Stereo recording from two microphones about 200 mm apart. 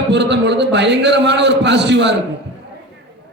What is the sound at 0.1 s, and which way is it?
A man's voice, 60° right (ahead or behind).